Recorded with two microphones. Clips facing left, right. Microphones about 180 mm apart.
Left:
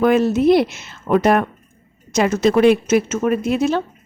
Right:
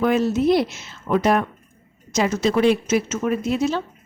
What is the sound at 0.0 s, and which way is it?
Speech, 60° left (ahead or behind).